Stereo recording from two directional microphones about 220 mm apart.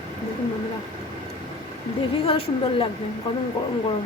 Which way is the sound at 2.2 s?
25° left (ahead or behind).